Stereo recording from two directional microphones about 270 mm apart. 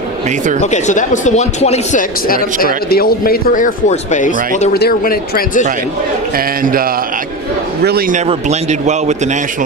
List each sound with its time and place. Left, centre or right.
0.6 s speech: left
6.3 s speech: right
7.9 s a man's voice: right